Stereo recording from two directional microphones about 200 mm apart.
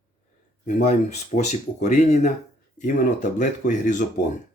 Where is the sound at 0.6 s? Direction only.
35° left (ahead or behind).